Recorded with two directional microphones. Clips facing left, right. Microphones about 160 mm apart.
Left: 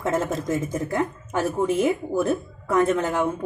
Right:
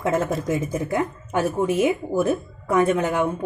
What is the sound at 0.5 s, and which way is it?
Speech, 10° right (ahead or behind).